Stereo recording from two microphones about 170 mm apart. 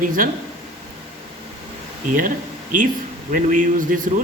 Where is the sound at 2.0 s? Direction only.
50° right (ahead or behind).